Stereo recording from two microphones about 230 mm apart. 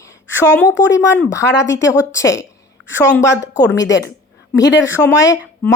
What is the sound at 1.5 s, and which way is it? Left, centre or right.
Speech, left.